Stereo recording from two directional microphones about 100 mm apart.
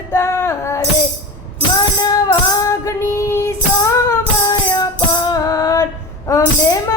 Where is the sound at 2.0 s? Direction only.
40° left (ahead or behind).